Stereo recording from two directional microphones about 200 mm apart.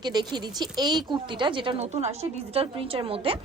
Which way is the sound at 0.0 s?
20° right (ahead or behind).